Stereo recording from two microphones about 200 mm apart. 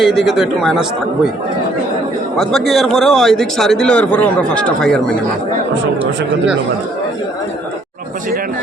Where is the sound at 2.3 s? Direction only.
Centre (ahead or behind).